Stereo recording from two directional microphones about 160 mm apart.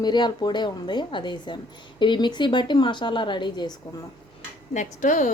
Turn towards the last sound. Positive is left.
turn(degrees=50)  # may be behind; listen again after turning